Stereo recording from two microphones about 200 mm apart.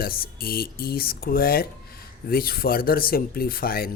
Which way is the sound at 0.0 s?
50° left (ahead or behind).